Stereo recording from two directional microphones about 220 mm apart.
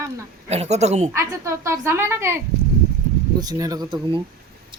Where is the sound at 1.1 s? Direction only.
10° right (ahead or behind).